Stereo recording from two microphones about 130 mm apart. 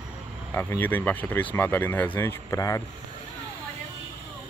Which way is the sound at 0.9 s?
15° left (ahead or behind).